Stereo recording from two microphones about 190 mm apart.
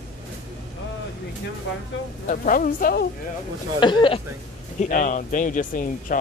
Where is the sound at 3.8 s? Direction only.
25° left (ahead or behind).